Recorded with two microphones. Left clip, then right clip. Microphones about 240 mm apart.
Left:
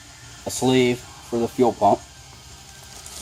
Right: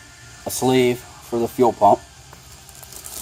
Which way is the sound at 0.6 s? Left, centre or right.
Right.